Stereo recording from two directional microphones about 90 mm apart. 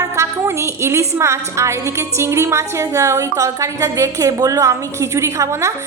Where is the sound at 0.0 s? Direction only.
35° right (ahead or behind).